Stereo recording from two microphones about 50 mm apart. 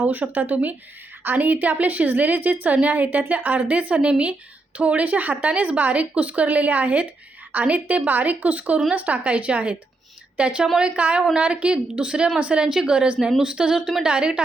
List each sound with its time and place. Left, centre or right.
0.0 s a woman's voice: right; by 14.4 s centre